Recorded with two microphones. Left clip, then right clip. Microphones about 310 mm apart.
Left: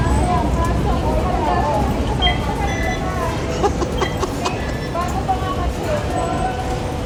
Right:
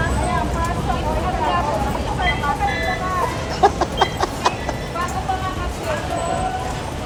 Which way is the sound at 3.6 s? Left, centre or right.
Centre.